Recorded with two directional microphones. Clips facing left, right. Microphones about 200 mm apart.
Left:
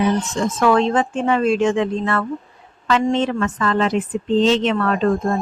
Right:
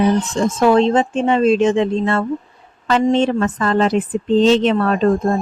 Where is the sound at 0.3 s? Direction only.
30° right (ahead or behind).